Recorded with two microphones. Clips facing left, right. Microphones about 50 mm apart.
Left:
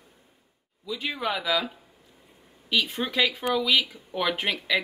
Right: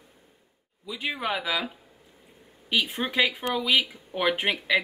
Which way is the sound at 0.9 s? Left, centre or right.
Centre.